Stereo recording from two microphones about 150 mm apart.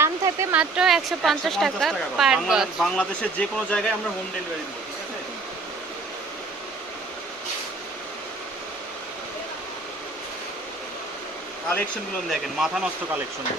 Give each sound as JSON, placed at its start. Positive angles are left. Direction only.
{"t": 0.0, "sound": "a sound", "side_deg": -15}
{"t": 0.6, "sound": "speech", "side_deg": -5}
{"t": 12.3, "sound": "speech", "side_deg": -5}